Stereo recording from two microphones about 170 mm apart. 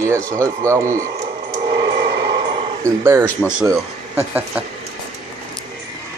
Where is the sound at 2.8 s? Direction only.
15° right (ahead or behind).